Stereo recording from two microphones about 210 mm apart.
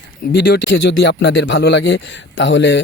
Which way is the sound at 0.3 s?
50° left (ahead or behind).